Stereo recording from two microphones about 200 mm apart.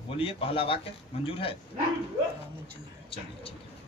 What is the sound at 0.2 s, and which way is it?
Speech, 25° left (ahead or behind).